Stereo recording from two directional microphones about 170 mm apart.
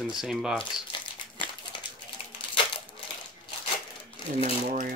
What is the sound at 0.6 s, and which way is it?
Crumpling, 30° left (ahead or behind).